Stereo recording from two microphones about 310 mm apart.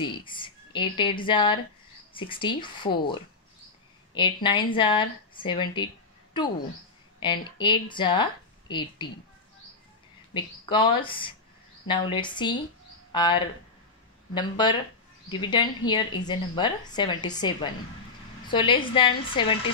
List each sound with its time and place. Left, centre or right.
0.0 s a woman's voice: centre
7.2 s speech: centre
10.3 s a woman's voice: centre